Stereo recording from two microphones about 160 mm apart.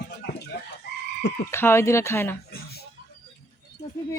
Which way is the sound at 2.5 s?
85° left.